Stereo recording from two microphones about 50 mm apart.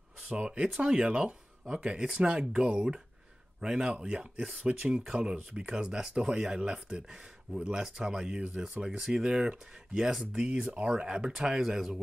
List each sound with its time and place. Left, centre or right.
0.2 s speech: right; by 11.9 s centre